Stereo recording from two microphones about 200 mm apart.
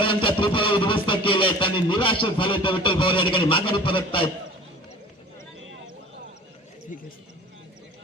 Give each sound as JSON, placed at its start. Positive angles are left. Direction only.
{"t": 0.0, "sound": "music", "side_deg": 25}